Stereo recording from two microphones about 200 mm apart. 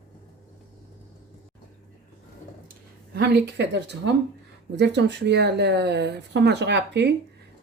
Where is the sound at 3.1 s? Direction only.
55° right (ahead or behind).